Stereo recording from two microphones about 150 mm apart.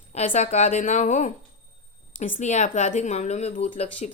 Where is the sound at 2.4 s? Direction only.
50° left (ahead or behind).